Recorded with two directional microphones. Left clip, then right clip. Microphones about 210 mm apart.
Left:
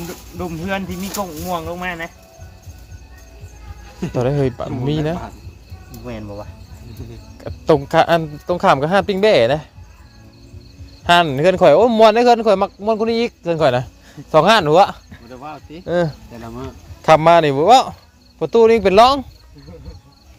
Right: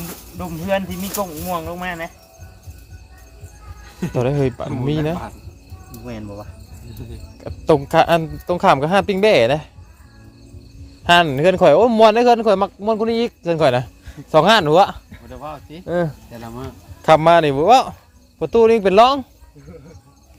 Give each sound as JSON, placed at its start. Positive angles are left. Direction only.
{"t": 0.3, "sound": "speech", "side_deg": -5}
{"t": 4.1, "sound": "speech", "side_deg": -5}
{"t": 6.1, "sound": "speech", "side_deg": -5}
{"t": 11.0, "sound": "speech", "side_deg": -10}
{"t": 15.3, "sound": "speech", "side_deg": -45}
{"t": 15.9, "sound": "speech", "side_deg": 0}
{"t": 16.3, "sound": "speech", "side_deg": -40}
{"t": 17.0, "sound": "speech", "side_deg": -5}